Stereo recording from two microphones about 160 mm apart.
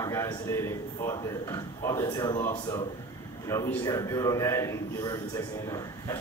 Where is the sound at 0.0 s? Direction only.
20° left (ahead or behind).